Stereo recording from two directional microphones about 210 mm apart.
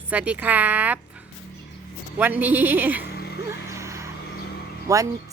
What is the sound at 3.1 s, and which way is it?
Music, 50° left (ahead or behind).